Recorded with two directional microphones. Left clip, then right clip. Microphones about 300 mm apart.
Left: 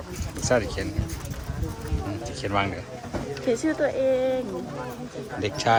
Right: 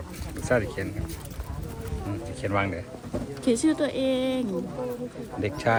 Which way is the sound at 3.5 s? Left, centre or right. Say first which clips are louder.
Even; right.